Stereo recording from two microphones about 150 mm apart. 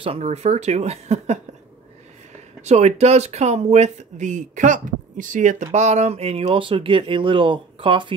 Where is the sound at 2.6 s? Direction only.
50° right (ahead or behind).